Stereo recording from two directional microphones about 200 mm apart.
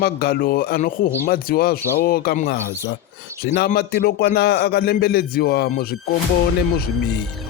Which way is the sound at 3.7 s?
50° left (ahead or behind).